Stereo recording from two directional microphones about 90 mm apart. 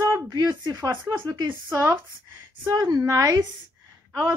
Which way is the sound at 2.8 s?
45° right (ahead or behind).